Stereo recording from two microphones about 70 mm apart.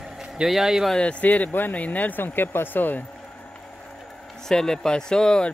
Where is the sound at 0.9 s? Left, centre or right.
Centre.